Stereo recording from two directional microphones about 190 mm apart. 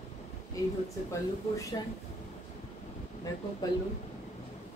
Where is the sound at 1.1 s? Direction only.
15° left (ahead or behind).